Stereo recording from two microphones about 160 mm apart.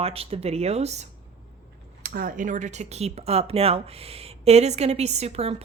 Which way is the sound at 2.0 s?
60° right (ahead or behind).